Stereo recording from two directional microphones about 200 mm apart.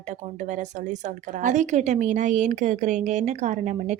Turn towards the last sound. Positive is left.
turn(degrees=-35)  # may be behind; listen again after turning